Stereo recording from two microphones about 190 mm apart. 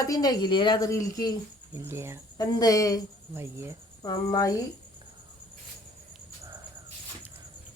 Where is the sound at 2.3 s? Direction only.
20° left (ahead or behind).